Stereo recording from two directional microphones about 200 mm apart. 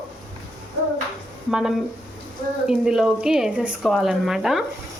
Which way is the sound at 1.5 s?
Centre (ahead or behind).